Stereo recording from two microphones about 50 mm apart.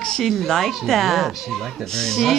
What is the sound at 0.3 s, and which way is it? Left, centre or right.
Speech, centre.